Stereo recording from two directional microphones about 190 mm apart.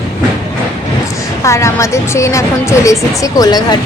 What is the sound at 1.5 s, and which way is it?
Speech, 15° left (ahead or behind).